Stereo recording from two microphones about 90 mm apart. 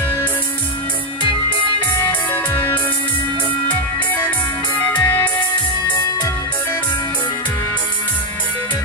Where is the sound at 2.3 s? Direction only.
25° left (ahead or behind).